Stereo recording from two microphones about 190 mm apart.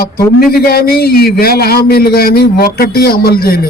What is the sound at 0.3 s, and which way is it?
A man's voice, 55° left (ahead or behind).